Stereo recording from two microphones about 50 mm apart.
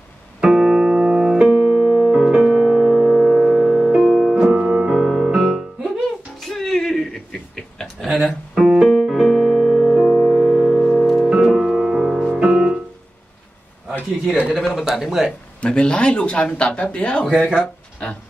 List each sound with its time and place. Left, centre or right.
0.4 s music: centre
4.0 s music: centre
4.5 s music: centre
4.9 s music: centre
6.4 s chuckle: centre
8.2 s piano: centre
10.0 s music: centre
10.3 s music: centre
10.8 s music: centre
11.2 s music: centre
14.6 s speech: centre
15.6 s speech: left
17.3 s speech: centre
18.0 s a sound: left